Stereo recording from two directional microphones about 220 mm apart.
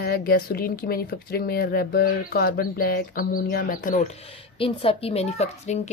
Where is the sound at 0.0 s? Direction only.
45° left (ahead or behind).